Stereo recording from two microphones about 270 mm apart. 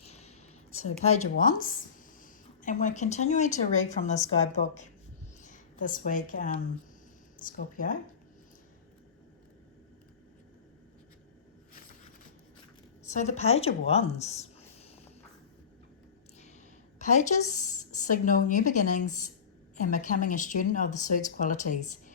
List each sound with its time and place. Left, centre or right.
0.0 s a sound: left
0.7 s a woman's voice: left
1.4 s a woman's voice: left
13.1 s speech: left
17.1 s speech: left